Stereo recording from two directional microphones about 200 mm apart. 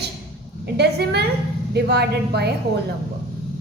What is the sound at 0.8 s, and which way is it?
A woman's voice, 55° right (ahead or behind).